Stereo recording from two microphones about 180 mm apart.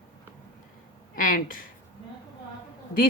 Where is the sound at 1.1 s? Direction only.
50° left (ahead or behind).